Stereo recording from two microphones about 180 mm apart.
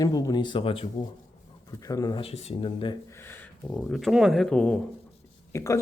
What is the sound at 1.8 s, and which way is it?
Speech, 20° left (ahead or behind).